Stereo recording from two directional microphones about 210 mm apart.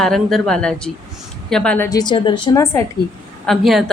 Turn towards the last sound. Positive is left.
turn(degrees=0)  # may be behind; listen again after turning